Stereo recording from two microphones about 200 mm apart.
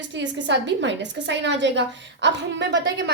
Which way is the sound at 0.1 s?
65° right (ahead or behind).